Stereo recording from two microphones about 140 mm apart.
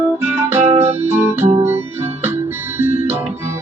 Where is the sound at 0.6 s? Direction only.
50° right (ahead or behind).